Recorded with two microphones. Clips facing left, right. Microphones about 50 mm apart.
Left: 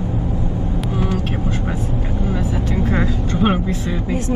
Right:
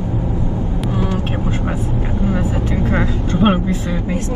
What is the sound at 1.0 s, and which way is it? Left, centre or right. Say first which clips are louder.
Vehicle: even; right.